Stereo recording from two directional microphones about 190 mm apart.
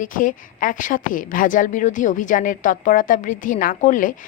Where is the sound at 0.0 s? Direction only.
45° left (ahead or behind).